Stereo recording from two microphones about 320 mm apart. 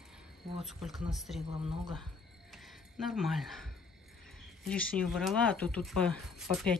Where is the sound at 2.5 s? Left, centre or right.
Centre.